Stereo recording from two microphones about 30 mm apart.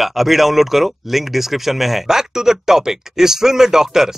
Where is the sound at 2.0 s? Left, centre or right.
Centre.